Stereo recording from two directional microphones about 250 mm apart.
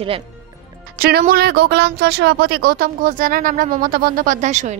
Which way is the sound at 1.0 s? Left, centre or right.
Right.